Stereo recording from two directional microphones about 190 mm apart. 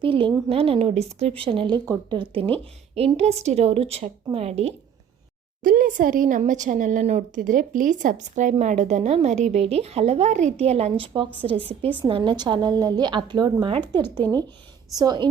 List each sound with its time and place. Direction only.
0.0 s a woman's voice: 25° right (ahead or behind)
5.6 s a woman's voice: 50° right (ahead or behind); by 13.8 s 25° right (ahead or behind)
14.2 s speech: 10° left (ahead or behind)
14.9 s a woman's voice: 20° right (ahead or behind)